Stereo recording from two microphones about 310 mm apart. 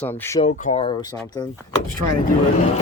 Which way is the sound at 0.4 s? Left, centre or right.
Left.